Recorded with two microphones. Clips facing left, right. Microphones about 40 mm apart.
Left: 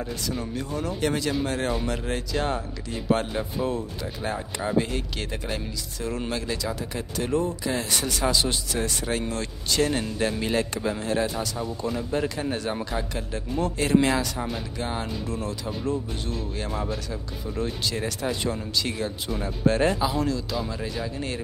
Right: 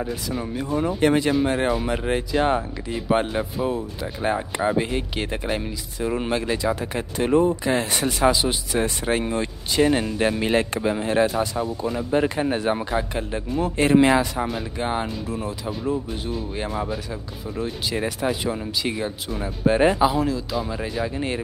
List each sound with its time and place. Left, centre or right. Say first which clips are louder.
0.0 s speech: right 3 dB; centre
4.2 s speech: right 7 dB; right
8.3 s speech: right 4 dB; centre
15.2 s speech: right 2 dB; centre
20.2 s speech: right 3 dB; centre
20.7 s speech: right 4 dB; centre